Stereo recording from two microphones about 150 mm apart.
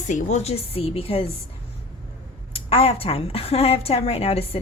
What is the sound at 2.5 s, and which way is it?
A woman's voice, 40° left (ahead or behind).